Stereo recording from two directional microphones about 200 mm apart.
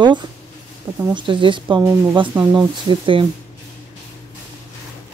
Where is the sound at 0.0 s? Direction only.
20° right (ahead or behind).